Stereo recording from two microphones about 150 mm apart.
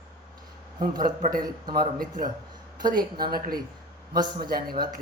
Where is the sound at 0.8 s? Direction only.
65° right (ahead or behind).